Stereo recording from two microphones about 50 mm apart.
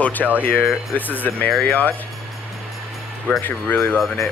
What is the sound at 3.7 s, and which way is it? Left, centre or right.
Speech, left.